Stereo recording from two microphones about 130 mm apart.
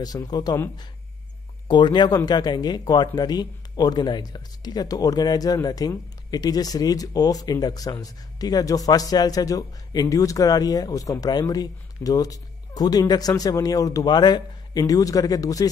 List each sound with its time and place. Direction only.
0.0 s speech: 30° left (ahead or behind)
1.7 s speech: 35° left (ahead or behind)